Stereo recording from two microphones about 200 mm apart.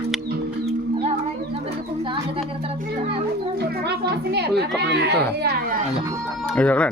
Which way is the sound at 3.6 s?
55° right (ahead or behind).